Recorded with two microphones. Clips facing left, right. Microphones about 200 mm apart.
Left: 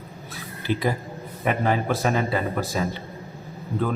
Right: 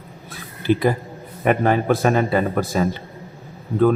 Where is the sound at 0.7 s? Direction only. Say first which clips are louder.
Right 6 dB; 55° right (ahead or behind).